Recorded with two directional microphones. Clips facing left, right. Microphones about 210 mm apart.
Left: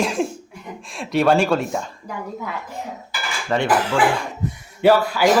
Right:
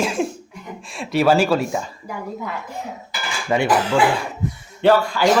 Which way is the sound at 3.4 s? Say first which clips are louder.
Right 1 dB; 10° right (ahead or behind).